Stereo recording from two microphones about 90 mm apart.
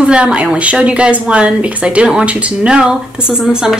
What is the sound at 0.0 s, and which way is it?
A woman's voice, 10° right (ahead or behind).